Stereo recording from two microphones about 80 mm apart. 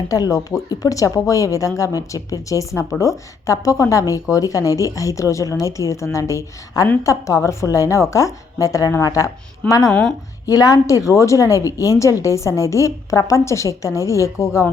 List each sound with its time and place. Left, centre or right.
0.1 s speech: left
9.9 s a woman's voice: centre
10.4 s a woman's voice: left